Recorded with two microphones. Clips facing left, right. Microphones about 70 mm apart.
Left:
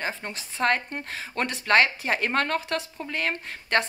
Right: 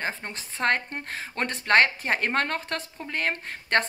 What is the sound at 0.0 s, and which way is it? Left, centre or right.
A woman's voice, right.